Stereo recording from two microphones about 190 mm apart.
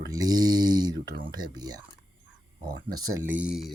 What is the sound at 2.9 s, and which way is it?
Speech, 10° right (ahead or behind).